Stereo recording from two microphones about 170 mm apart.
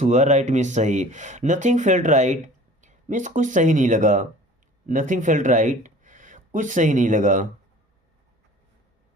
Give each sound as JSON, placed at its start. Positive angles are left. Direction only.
{"t": 0.0, "sound": "speech", "side_deg": -45}